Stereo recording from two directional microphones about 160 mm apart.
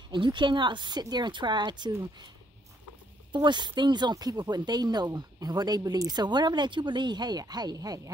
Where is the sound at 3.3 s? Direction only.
30° right (ahead or behind).